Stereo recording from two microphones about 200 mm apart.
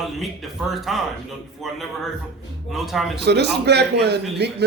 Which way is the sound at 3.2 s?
55° right (ahead or behind).